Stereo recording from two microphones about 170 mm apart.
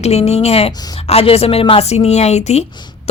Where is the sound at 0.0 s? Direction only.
40° left (ahead or behind).